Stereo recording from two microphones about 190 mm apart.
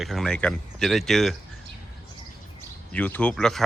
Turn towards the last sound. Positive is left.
turn(degrees=0)  # may be behind; listen again after turning